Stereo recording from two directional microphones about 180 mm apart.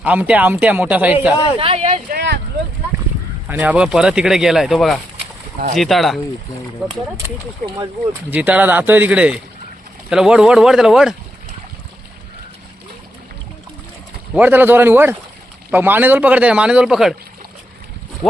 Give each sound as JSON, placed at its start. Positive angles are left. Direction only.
{"t": 0.0, "sound": "a man's voice", "side_deg": -10}
{"t": 1.5, "sound": "speech", "side_deg": -30}
{"t": 2.0, "sound": "speech", "side_deg": -65}
{"t": 3.5, "sound": "speech", "side_deg": -5}
{"t": 8.3, "sound": "a man's voice", "side_deg": -10}
{"t": 14.3, "sound": "a man's voice", "side_deg": -10}